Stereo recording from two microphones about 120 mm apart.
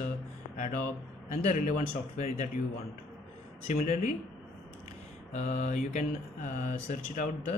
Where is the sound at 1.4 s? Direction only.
85° left.